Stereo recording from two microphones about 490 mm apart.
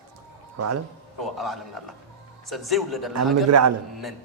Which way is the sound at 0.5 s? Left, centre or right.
Right.